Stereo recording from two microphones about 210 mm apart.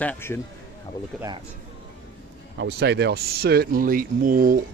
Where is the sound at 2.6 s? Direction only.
55° right (ahead or behind).